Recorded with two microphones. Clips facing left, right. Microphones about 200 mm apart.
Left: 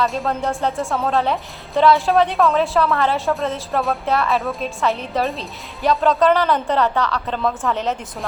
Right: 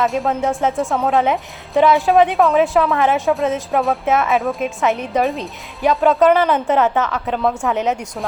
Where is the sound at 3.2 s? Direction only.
Centre (ahead or behind).